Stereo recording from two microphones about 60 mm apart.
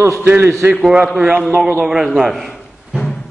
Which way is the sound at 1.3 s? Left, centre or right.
Right.